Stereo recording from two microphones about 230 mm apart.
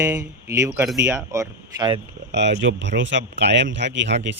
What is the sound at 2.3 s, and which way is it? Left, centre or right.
Speech, right.